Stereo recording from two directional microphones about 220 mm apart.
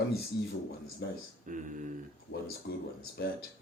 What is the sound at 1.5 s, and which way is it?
Speech, 35° right (ahead or behind).